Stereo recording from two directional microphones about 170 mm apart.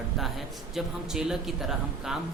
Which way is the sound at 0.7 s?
Centre (ahead or behind).